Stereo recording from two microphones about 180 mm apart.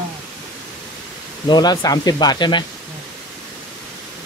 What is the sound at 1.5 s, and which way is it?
Speech, 20° left (ahead or behind).